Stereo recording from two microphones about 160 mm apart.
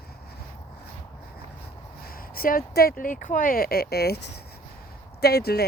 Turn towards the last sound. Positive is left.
turn(degrees=80)